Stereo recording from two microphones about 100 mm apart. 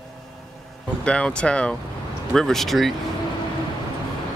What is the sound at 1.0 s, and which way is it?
Speech, 10° left (ahead or behind).